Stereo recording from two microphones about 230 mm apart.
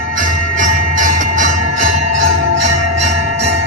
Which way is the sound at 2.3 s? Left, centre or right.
Right.